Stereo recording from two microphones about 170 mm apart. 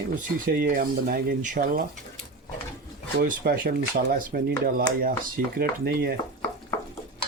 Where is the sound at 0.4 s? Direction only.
60° right (ahead or behind).